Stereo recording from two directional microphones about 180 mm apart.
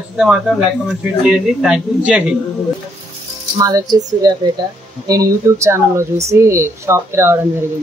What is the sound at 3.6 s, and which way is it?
A woman's voice, 20° right (ahead or behind).